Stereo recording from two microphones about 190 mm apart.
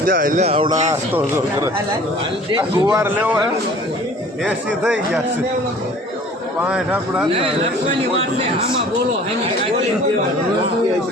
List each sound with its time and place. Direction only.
0.0 s speech: 45° right (ahead or behind)
2.6 s a man's voice: 20° right (ahead or behind)
3.0 s speech: 10° right (ahead or behind)
4.4 s a man's voice: 5° right (ahead or behind)
6.6 s a man's voice: 5° right (ahead or behind)